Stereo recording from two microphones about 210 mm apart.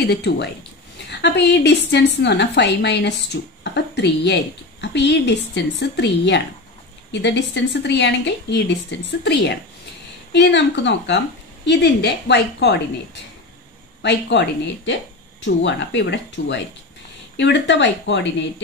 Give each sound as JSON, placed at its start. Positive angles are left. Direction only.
{"t": 0.0, "sound": "a woman's voice", "side_deg": 55}